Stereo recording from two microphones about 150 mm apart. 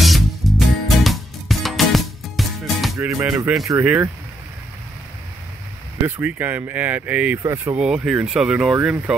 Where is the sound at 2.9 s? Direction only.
20° right (ahead or behind).